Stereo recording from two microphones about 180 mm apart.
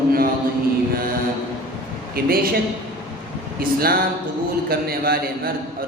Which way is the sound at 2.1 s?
55° right (ahead or behind).